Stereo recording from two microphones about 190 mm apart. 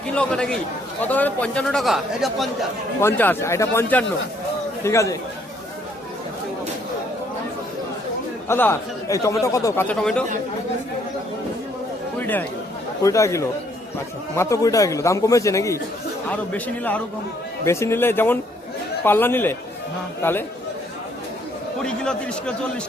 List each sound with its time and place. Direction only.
0.1 s speech: 5° left (ahead or behind)
3.0 s speech: 10° left (ahead or behind)
8.4 s speech: 10° left (ahead or behind)
12.2 s speech: 10° left (ahead or behind)
21.8 s speech: 5° left (ahead or behind)